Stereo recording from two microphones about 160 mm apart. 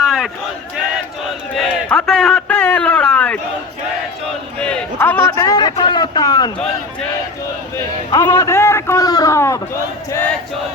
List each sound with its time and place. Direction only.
0.0 s crowd: centre (ahead or behind)
1.5 s a man's voice: 5° left (ahead or behind)
4.3 s a sound: 5° left (ahead or behind)
4.9 s a man's voice: 15° left (ahead or behind)
5.4 s a man's voice: 25° left (ahead or behind)
8.1 s a man's voice: 20° left (ahead or behind)